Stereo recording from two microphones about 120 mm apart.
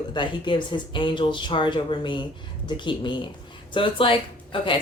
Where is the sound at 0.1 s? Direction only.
40° left (ahead or behind).